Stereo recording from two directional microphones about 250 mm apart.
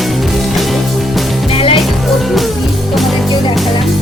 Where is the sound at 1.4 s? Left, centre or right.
Left.